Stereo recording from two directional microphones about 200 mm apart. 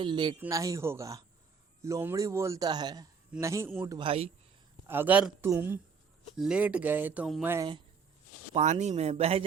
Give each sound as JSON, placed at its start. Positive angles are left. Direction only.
{"t": 0.0, "sound": "a man's voice", "side_deg": -25}
{"t": 4.9, "sound": "a man's voice", "side_deg": -10}
{"t": 8.5, "sound": "speech", "side_deg": -35}